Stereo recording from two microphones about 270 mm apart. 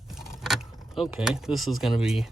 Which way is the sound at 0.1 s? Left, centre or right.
Centre.